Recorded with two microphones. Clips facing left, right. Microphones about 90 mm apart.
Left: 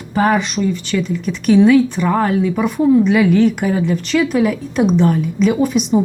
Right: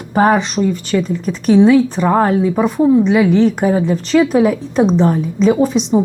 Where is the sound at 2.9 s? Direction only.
20° right (ahead or behind).